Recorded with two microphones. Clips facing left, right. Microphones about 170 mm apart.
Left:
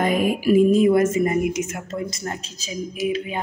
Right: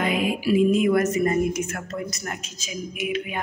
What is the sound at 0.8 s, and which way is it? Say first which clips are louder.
Speech: left 3 dB; 25° left (ahead or behind).